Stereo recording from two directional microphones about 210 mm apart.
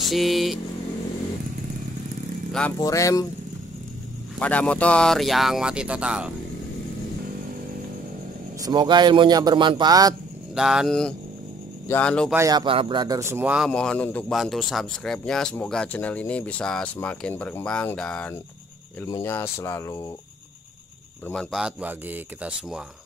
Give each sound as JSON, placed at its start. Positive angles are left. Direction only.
{"t": 0.0, "sound": "speech", "side_deg": 0}
{"t": 2.8, "sound": "speech", "side_deg": 15}
{"t": 4.4, "sound": "speech", "side_deg": 5}
{"t": 8.6, "sound": "a man's voice", "side_deg": -20}
{"t": 10.5, "sound": "speech", "side_deg": 0}
{"t": 12.4, "sound": "a man's voice", "side_deg": -20}
{"t": 13.7, "sound": "speech", "side_deg": 5}
{"t": 21.3, "sound": "speech", "side_deg": 0}